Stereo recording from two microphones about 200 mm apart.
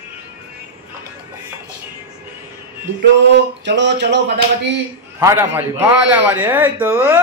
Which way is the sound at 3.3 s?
60° right (ahead or behind).